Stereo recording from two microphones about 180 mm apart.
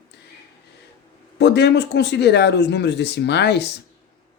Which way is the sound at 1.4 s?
70° left (ahead or behind).